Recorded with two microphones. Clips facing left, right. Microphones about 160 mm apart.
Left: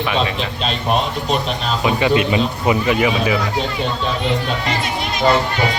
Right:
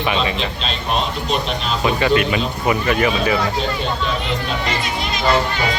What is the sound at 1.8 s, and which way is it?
Speech, 15° left (ahead or behind).